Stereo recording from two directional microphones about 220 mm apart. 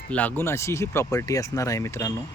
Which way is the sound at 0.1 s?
5° left (ahead or behind).